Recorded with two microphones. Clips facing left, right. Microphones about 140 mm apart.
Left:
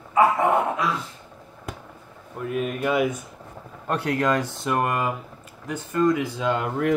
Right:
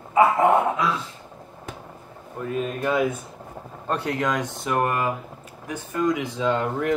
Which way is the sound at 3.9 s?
25° right (ahead or behind).